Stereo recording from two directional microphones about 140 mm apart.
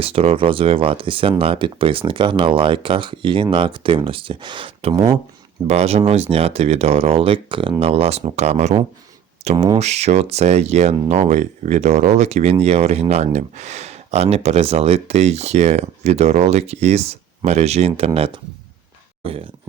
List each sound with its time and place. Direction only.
0.0 s speech: 45° right (ahead or behind)